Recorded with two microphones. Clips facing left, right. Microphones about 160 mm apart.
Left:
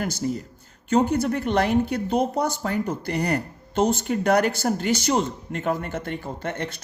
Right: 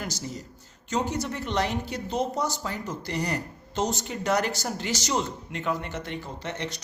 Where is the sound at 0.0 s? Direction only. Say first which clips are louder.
Left 8 dB; 55° left (ahead or behind).